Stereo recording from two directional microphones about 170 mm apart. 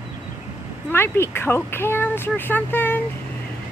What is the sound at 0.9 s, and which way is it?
Speech, 15° left (ahead or behind).